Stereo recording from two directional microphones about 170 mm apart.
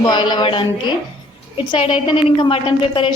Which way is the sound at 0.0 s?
25° left (ahead or behind).